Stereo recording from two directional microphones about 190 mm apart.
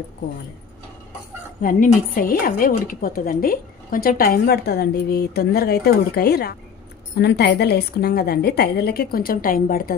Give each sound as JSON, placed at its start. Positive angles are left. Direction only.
{"t": 1.6, "sound": "a woman's voice", "side_deg": 45}